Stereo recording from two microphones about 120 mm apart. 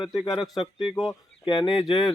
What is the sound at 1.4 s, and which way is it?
Speech, 40° left (ahead or behind).